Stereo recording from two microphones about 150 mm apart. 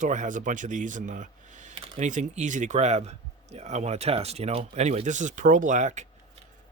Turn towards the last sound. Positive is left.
turn(degrees=-50)  # may be behind; listen again after turning